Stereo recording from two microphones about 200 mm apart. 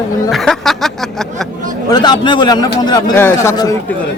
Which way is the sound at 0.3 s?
Centre (ahead or behind).